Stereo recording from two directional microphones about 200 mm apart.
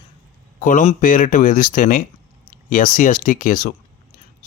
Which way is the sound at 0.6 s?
40° left (ahead or behind).